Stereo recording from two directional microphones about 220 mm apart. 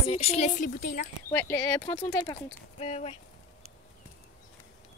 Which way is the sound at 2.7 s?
30° left (ahead or behind).